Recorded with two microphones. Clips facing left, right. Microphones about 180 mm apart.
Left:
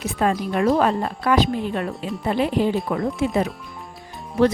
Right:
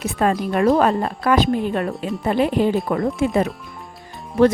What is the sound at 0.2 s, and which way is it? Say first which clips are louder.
Speech: right 2 dB; 50° right (ahead or behind).